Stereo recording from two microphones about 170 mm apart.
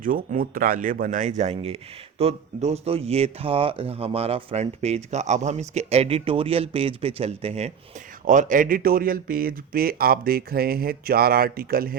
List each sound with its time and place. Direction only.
0.0 s speech: 55° right (ahead or behind)